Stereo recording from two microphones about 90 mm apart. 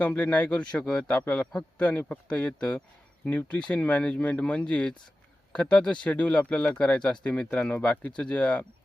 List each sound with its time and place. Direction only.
0.0 s a man's voice: 15° left (ahead or behind)